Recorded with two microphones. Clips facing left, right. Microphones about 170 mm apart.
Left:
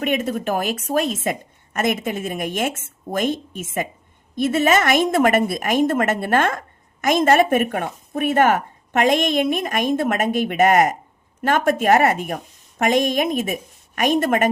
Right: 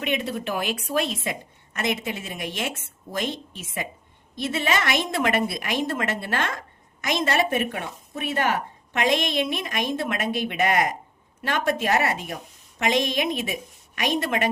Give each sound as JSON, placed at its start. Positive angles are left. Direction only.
{"t": 0.0, "sound": "a woman's voice", "side_deg": 45}